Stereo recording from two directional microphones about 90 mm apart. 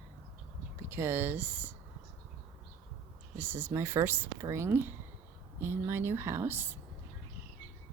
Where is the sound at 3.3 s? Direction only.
25° right (ahead or behind).